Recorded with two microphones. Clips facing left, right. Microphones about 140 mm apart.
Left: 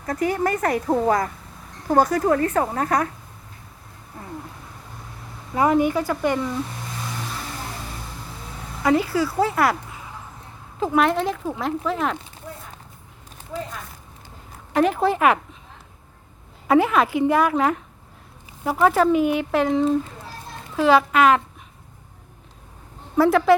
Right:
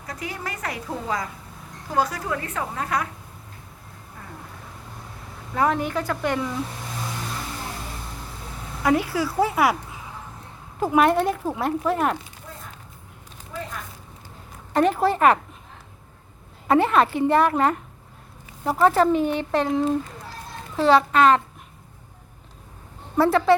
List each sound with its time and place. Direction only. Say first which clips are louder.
0.0 s a woman's voice: left 11 dB; 50° left (ahead or behind)
5.5 s speech: left 4 dB; 10° left (ahead or behind)
8.8 s speech: left 2 dB; 5° right (ahead or behind)
10.8 s speech: right 1 dB; 10° right (ahead or behind)
14.7 s speech: even; centre (ahead or behind)
16.6 s speech: left 1 dB; 5° left (ahead or behind)
23.1 s speech: left 2 dB; centre (ahead or behind)